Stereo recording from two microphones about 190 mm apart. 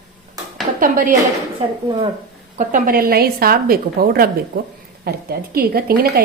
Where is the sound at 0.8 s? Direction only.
45° right (ahead or behind).